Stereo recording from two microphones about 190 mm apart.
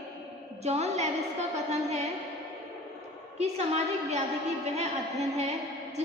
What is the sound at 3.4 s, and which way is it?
A woman's voice, 35° right (ahead or behind).